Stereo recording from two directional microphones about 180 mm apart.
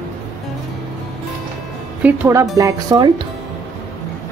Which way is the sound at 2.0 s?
15° right (ahead or behind).